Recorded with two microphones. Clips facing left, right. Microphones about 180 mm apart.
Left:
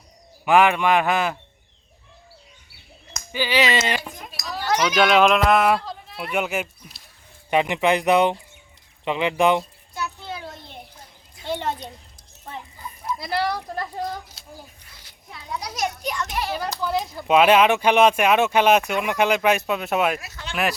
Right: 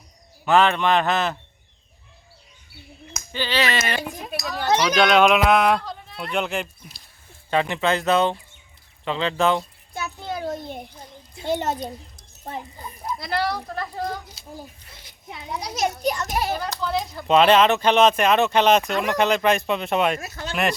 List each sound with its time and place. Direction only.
0.4 s speech: 10° left (ahead or behind)
3.3 s speech: 10° left (ahead or behind)
4.4 s speech: 25° right (ahead or behind)
4.9 s speech: 5° left (ahead or behind)
7.5 s speech: 15° left (ahead or behind)
9.9 s a sound: 50° right (ahead or behind)
11.4 s a child's voice: 45° right (ahead or behind)
13.1 s speech: 5° left (ahead or behind)
15.0 s a child's voice: 20° right (ahead or behind)
16.1 s a child's voice: 40° right (ahead or behind)
16.7 s speech: 5° left (ahead or behind)
20.2 s a child's voice: 45° right (ahead or behind)